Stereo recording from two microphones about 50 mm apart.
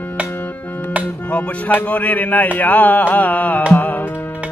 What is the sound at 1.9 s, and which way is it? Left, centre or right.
Music, left.